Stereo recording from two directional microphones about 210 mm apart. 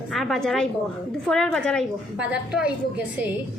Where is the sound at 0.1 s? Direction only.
Centre (ahead or behind).